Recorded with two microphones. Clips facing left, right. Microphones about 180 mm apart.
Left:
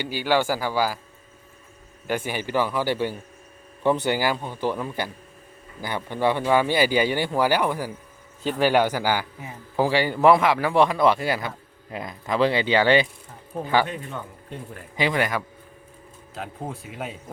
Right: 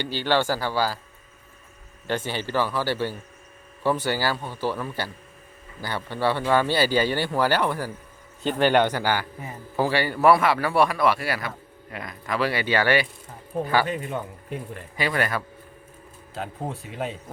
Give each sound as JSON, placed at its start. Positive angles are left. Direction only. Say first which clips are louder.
{"t": 0.0, "sound": "a man's voice", "louder": "left 1 dB", "side_deg": 10}
{"t": 2.0, "sound": "a man's voice", "louder": "left 1 dB", "side_deg": 10}
{"t": 14.9, "sound": "a man's voice", "louder": "left 2 dB", "side_deg": 15}
{"t": 16.3, "sound": "speech", "louder": "right 2 dB", "side_deg": 0}